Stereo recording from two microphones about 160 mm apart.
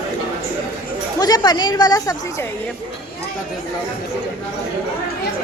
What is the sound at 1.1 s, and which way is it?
Speech, 25° left (ahead or behind).